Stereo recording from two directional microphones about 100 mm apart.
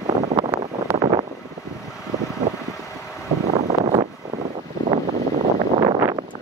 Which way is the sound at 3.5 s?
90° right.